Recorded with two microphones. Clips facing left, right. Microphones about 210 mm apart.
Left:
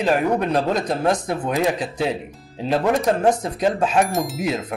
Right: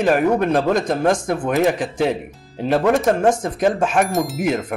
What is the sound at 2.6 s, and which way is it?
Speech, 60° right (ahead or behind).